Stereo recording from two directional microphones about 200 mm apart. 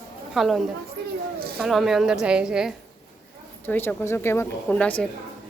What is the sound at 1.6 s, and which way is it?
A woman's voice, centre (ahead or behind).